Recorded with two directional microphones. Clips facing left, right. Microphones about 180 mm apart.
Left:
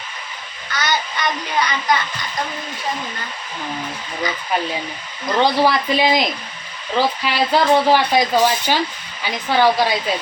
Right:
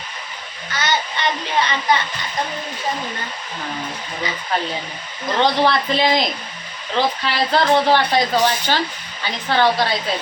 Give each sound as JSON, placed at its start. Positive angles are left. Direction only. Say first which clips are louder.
{"t": 0.7, "sound": "child singing", "louder": "even", "side_deg": -25}
{"t": 5.4, "sound": "speech", "louder": "left 1 dB", "side_deg": 10}